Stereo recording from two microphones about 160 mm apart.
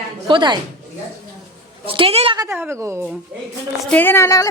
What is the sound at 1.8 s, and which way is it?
Speech, 35° right (ahead or behind).